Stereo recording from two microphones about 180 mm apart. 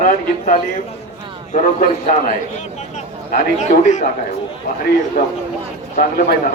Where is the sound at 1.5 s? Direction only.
45° left (ahead or behind).